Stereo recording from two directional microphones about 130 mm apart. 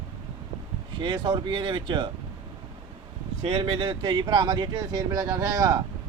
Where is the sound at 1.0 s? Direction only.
40° right (ahead or behind).